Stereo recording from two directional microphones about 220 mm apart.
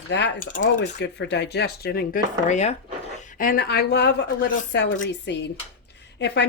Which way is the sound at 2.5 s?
30° left (ahead or behind).